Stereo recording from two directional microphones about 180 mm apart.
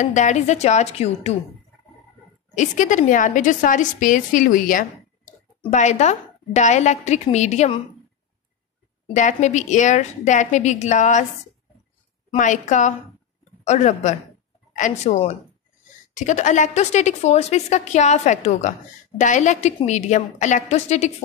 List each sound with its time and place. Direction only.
0.0 s a woman's voice: 40° left (ahead or behind)
2.5 s a woman's voice: 45° left (ahead or behind)
9.1 s a woman's voice: 40° left (ahead or behind)
12.4 s a woman's voice: 45° left (ahead or behind)